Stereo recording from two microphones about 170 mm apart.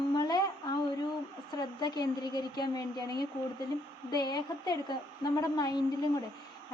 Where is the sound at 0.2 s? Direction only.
25° left (ahead or behind).